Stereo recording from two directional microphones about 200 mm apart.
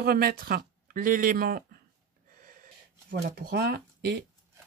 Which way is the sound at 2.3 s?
45° right (ahead or behind).